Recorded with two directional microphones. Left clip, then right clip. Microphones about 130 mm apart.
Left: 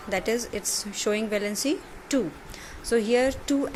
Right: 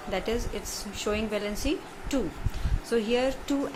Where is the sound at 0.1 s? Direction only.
45° left (ahead or behind).